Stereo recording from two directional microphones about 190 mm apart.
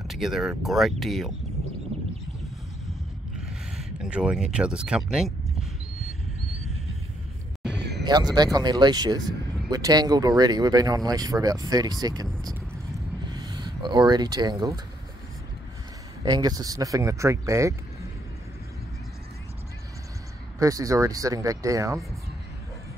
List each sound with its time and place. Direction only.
0.1 s speech: centre (ahead or behind)
3.7 s a sound: 5° right (ahead or behind)
8.0 s speech: 20° right (ahead or behind)
13.3 s speech: 20° right (ahead or behind)
16.3 s speech: 20° right (ahead or behind)
20.5 s speech: 15° right (ahead or behind)